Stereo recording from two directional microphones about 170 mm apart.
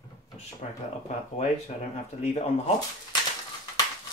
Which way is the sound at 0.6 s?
45° left (ahead or behind).